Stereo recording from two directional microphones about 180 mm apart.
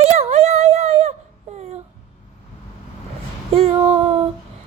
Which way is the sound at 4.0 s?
35° right (ahead or behind).